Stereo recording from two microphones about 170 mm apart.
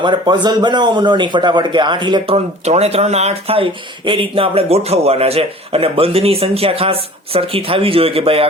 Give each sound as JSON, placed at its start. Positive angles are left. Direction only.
{"t": 0.0, "sound": "speech", "side_deg": -25}